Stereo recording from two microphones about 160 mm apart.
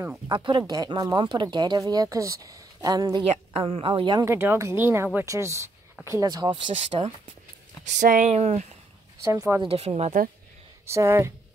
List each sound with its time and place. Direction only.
0.3 s speech: 30° right (ahead or behind)
3.3 s a woman's voice: 35° right (ahead or behind)
4.3 s a woman's voice: 15° right (ahead or behind); by 7.1 s 35° right (ahead or behind)
7.8 s speech: 50° right (ahead or behind)
9.2 s speech: 20° right (ahead or behind)
9.6 s a woman's voice: 40° right (ahead or behind)
10.9 s speech: 15° right (ahead or behind)